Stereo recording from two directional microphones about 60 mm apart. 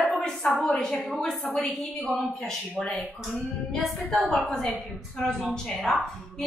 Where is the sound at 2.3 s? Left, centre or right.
Centre.